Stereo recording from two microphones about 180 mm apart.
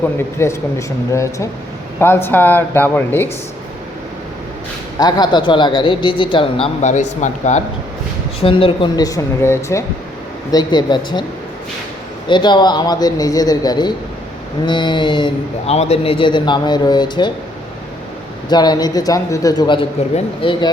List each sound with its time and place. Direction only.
0.0 s speech: 15° left (ahead or behind)
4.9 s a man's voice: 20° left (ahead or behind); by 7.6 s 40° left (ahead or behind)
8.4 s a man's voice: 30° left (ahead or behind)
12.3 s a man's voice: 25° left (ahead or behind)
18.4 s a man's voice: 25° left (ahead or behind)